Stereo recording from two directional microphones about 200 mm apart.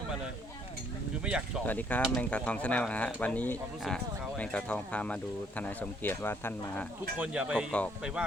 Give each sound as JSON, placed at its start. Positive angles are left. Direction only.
{"t": 1.2, "sound": "speech", "side_deg": -5}
{"t": 1.6, "sound": "speech", "side_deg": 10}
{"t": 7.2, "sound": "speech", "side_deg": -5}